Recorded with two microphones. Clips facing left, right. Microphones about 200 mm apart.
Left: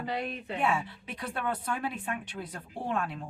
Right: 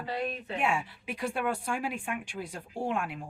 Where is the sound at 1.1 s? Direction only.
10° right (ahead or behind).